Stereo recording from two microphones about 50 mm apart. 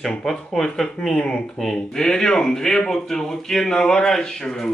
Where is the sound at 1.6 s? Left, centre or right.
Centre.